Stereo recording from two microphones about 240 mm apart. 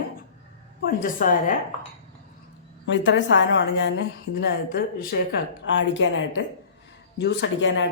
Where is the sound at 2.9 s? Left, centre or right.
Left.